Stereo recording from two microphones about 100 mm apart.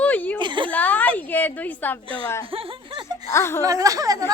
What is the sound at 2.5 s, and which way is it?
Speech, 55° right (ahead or behind).